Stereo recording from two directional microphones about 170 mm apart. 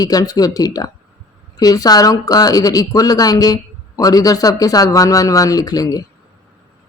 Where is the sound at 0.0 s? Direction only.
20° left (ahead or behind).